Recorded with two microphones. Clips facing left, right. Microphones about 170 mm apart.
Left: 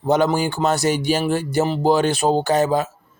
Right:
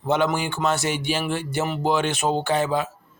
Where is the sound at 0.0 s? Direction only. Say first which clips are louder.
Left 4 dB; 35° left (ahead or behind).